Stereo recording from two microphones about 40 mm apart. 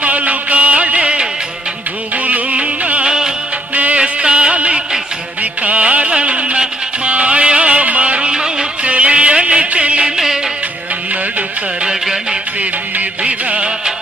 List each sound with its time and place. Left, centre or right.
0.0 s music: right
3.0 s music: centre
3.8 s music: right
4.0 s music: right
8.3 s music: centre
8.8 s music: right
10.2 s music: centre
11.1 s music: right
12.0 s music: centre
12.5 s music: right